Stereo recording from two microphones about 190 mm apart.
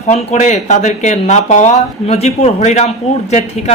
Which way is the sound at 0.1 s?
35° left (ahead or behind).